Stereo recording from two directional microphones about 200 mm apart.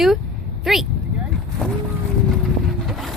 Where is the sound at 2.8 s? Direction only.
Centre (ahead or behind).